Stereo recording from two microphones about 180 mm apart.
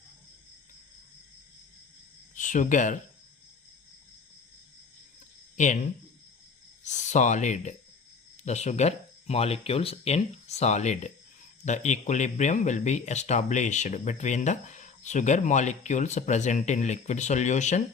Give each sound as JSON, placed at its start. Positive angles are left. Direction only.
{"t": 2.3, "sound": "speech", "side_deg": 45}
{"t": 5.5, "sound": "speech", "side_deg": 40}